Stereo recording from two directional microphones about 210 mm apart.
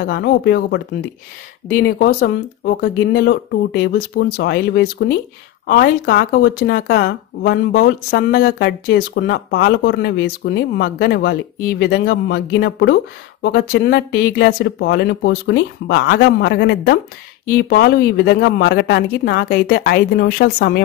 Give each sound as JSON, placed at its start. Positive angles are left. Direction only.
{"t": 0.0, "sound": "speech", "side_deg": 50}
{"t": 2.0, "sound": "speech", "side_deg": 40}